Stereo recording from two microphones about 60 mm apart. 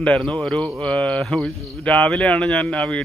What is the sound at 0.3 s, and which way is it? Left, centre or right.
Speech, centre.